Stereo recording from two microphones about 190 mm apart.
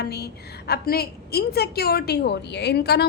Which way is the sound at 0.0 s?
60° left (ahead or behind).